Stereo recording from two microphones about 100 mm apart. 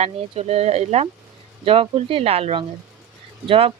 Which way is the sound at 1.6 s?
70° right (ahead or behind).